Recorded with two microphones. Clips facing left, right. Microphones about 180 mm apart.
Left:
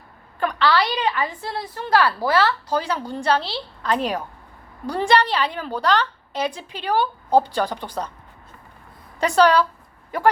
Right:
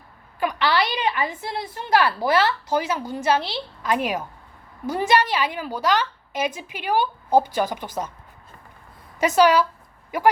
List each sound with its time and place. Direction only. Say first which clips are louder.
0.3 s a woman's voice: left 2 dB; 15° right (ahead or behind)
9.2 s a woman's voice: even; 15° right (ahead or behind)